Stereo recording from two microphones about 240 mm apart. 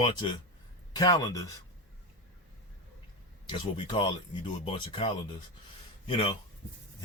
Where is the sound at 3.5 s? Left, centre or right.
Left.